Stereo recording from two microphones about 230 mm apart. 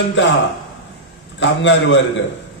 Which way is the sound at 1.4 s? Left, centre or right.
Left.